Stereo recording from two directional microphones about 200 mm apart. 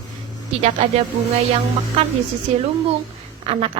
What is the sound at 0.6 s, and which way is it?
Speech, 35° right (ahead or behind).